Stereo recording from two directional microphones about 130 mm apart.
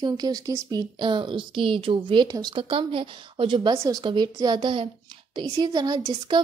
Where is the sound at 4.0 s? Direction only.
40° right (ahead or behind).